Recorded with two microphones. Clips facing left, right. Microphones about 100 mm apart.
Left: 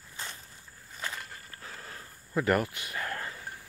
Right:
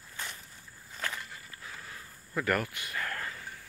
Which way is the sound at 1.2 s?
45° left (ahead or behind).